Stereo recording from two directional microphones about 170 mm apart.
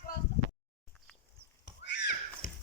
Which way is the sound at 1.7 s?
90° left.